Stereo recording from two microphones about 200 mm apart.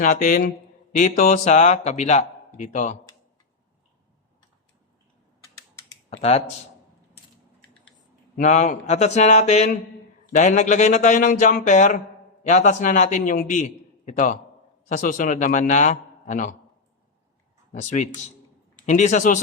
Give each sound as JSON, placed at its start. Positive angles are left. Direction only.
{"t": 0.0, "sound": "a man's voice", "side_deg": 45}
{"t": 6.1, "sound": "speech", "side_deg": 30}
{"t": 8.4, "sound": "a man's voice", "side_deg": 35}
{"t": 17.7, "sound": "a man's voice", "side_deg": 35}